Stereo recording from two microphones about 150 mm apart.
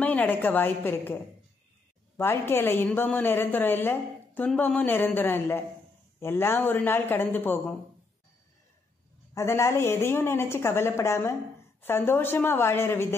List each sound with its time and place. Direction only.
0.0 s a woman's voice: 10° left (ahead or behind)
9.3 s a woman's voice: 20° left (ahead or behind)